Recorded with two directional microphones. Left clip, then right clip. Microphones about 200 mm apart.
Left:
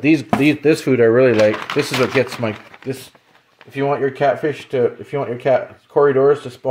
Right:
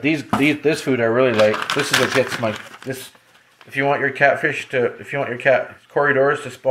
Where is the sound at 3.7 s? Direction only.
25° left (ahead or behind).